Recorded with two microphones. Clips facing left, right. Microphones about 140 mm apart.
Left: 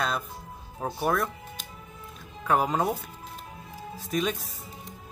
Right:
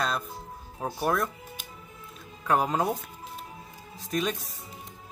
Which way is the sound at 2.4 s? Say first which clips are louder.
Left 1 dB; centre (ahead or behind).